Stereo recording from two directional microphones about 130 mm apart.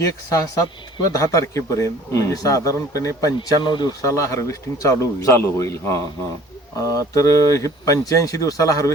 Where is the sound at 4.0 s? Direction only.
25° left (ahead or behind).